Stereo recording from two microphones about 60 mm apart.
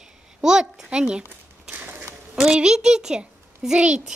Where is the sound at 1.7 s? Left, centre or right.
Right.